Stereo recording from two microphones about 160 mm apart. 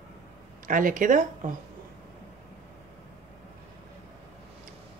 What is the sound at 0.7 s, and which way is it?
Speech, 55° right (ahead or behind).